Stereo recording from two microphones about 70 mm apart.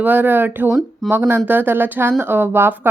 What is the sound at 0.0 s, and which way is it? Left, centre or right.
Speech, right.